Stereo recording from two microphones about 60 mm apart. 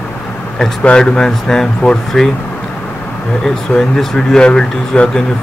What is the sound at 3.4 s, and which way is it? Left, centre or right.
Speech, centre.